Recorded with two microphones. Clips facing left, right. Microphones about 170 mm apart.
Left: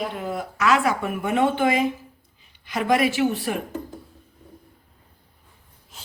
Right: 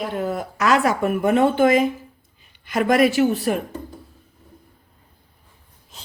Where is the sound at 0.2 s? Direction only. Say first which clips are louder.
Right 3 dB; 45° right (ahead or behind).